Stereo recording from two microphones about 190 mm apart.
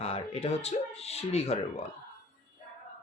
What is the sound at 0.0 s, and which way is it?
Speech, 35° left (ahead or behind).